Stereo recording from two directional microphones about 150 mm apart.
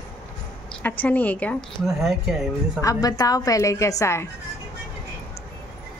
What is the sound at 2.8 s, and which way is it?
A woman's voice, 25° left (ahead or behind).